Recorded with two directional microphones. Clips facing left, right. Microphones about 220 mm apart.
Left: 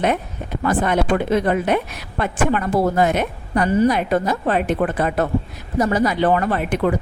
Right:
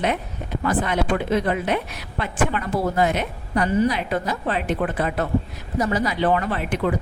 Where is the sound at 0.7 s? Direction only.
50° left (ahead or behind).